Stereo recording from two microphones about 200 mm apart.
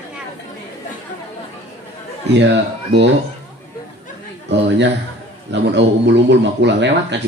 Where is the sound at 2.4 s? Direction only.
60° right (ahead or behind).